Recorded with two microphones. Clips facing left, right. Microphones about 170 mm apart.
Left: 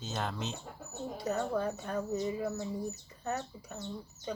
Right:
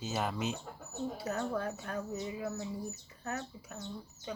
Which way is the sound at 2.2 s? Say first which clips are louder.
Left 5 dB; 40° left (ahead or behind).